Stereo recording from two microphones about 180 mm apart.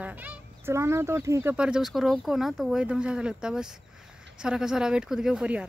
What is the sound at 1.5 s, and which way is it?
Speech, 5° right (ahead or behind).